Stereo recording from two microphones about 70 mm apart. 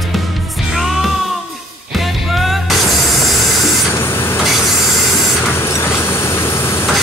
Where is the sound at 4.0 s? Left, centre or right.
Left.